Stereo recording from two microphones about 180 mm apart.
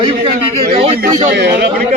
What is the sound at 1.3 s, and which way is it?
Speech, 70° right (ahead or behind).